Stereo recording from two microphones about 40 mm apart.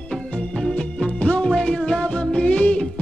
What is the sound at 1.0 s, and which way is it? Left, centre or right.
Music, left.